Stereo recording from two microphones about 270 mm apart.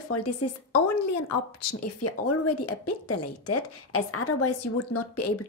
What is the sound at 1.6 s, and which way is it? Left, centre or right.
A woman's voice, left.